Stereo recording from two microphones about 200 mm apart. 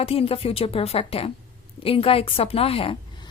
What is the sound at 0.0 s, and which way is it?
A woman's voice, 30° left (ahead or behind).